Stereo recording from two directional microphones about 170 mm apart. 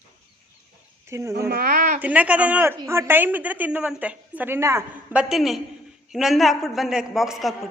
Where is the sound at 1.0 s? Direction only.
15° right (ahead or behind).